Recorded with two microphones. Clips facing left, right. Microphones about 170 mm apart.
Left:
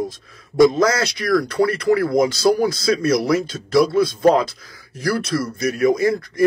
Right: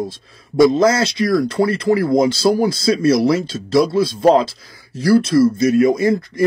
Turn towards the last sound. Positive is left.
turn(degrees=-25)  # may be behind; listen again after turning